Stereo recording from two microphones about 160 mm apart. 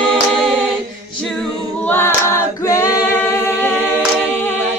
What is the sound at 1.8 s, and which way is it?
A capella, 15° left (ahead or behind).